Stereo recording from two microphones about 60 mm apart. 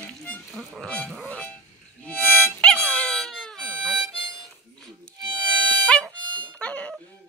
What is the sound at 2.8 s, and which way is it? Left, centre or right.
Dog, left.